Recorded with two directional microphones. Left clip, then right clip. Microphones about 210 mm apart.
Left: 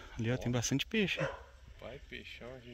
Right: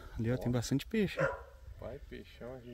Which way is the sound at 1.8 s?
35° right (ahead or behind).